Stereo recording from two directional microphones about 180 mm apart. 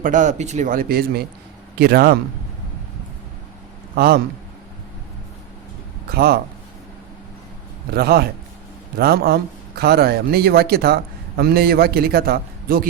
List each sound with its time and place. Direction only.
0.0 s a man's voice: 45° right (ahead or behind)
3.9 s a man's voice: 60° right (ahead or behind)
6.1 s a man's voice: 60° right (ahead or behind)
7.9 s a man's voice: 60° right (ahead or behind)